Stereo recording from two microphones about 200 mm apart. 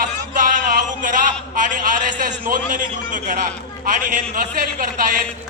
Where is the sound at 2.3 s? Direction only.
40° right (ahead or behind).